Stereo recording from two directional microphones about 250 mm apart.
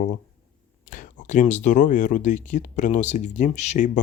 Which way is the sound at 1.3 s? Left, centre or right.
Left.